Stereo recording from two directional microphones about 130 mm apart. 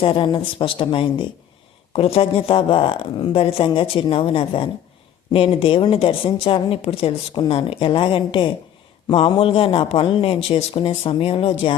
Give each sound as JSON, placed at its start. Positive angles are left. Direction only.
{"t": 0.0, "sound": "a woman's voice", "side_deg": 40}